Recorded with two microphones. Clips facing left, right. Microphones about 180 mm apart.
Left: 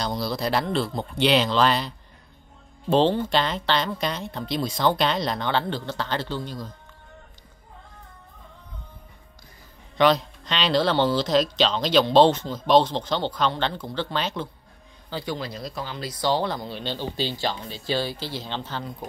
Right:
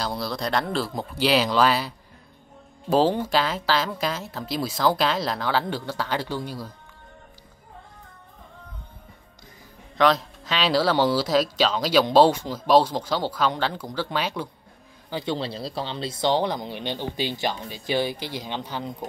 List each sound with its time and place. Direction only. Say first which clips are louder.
0.0 s speech: left 1 dB; centre (ahead or behind)
9.9 s speech: left 1 dB; centre (ahead or behind); by 15.3 s 15° right (ahead or behind)
15.3 s speech: right 3 dB; 30° right (ahead or behind); by 19.0 s 15° right (ahead or behind)